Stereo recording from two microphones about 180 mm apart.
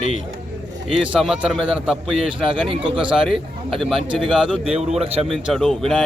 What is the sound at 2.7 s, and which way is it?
Speech, 30° right (ahead or behind).